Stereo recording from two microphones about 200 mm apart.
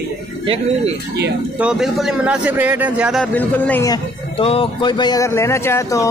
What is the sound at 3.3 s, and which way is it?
A man's voice, 10° left (ahead or behind).